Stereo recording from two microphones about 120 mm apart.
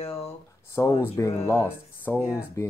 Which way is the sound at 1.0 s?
25° left (ahead or behind).